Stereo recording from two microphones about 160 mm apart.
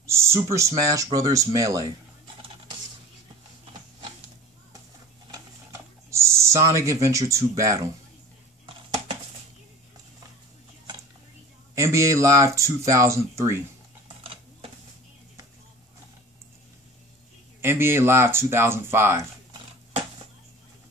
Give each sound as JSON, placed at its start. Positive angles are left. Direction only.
{"t": 0.0, "sound": "speech", "side_deg": -15}
{"t": 5.3, "sound": "typing", "side_deg": -15}
{"t": 11.7, "sound": "speech", "side_deg": -20}
{"t": 17.6, "sound": "speech", "side_deg": -15}